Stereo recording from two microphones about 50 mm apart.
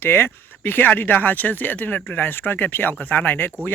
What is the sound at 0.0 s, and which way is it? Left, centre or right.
Speech, left.